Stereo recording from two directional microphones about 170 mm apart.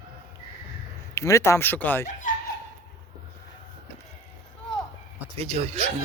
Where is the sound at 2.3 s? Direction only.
50° left (ahead or behind).